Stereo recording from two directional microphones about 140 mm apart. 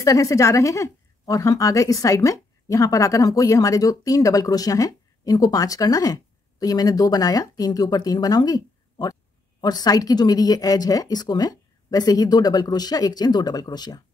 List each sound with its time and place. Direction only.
0.0 s a woman's voice: 25° left (ahead or behind)